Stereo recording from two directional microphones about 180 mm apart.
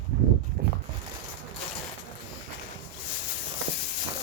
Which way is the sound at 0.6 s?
55° right (ahead or behind).